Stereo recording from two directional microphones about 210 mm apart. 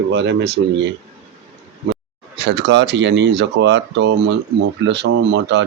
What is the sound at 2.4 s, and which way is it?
Speech, 60° right (ahead or behind).